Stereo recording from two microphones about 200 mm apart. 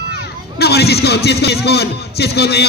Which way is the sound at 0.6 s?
55° left (ahead or behind).